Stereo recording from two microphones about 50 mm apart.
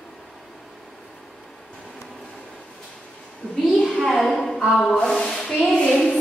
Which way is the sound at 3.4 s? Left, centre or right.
Left.